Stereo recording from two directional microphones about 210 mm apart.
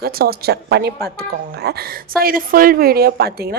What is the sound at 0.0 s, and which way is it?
A woman's voice, 45° right (ahead or behind).